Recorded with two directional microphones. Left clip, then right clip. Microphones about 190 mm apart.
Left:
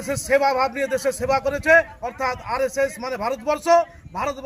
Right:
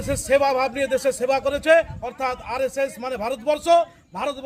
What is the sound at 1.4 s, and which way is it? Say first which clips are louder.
Speech: right 1 dB; 35° right (ahead or behind).